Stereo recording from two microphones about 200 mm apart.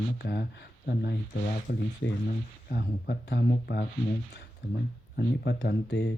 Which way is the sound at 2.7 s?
50° left (ahead or behind).